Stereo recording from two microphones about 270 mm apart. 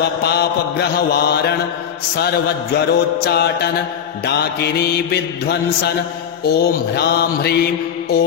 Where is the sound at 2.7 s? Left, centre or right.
Left.